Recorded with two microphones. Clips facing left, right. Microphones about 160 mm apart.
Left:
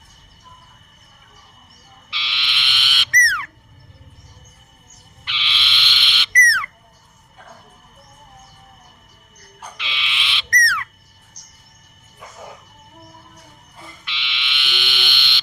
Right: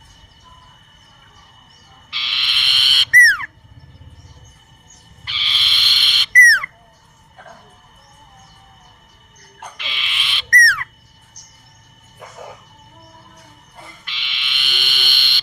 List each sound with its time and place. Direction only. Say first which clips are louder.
2.0 s frog: left 2 dB; 45° right (ahead or behind)
5.2 s frog: left 2 dB; 40° right (ahead or behind)
9.6 s owl: even; 45° right (ahead or behind)
14.0 s frog: left 5 dB; 45° right (ahead or behind)